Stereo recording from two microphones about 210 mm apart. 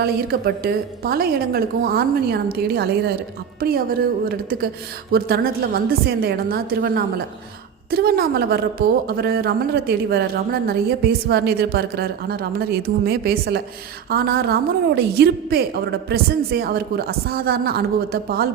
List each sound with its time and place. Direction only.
0.0 s speech: 45° right (ahead or behind)